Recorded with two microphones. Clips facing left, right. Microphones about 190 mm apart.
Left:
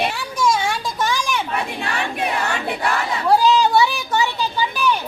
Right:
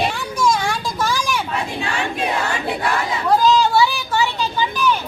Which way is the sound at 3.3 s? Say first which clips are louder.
Even; 10° left (ahead or behind).